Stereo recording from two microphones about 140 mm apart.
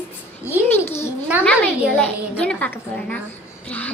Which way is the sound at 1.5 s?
10° left (ahead or behind).